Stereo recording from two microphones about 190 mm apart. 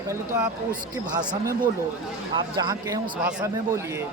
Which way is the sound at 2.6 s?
20° right (ahead or behind).